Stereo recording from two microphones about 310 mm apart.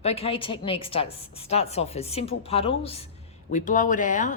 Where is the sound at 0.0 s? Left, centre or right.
Centre.